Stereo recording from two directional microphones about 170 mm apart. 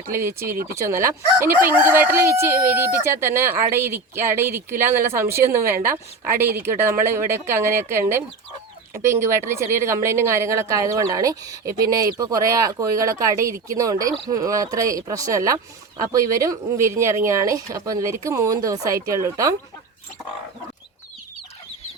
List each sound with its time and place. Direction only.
0.1 s speech: 15° right (ahead or behind)
7.0 s speech: 15° right (ahead or behind)